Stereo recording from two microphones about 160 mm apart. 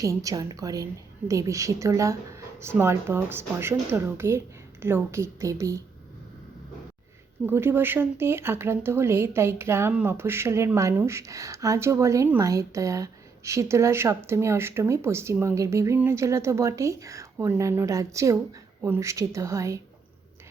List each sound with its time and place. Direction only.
0.0 s speech: 20° right (ahead or behind)
7.4 s speech: 15° right (ahead or behind)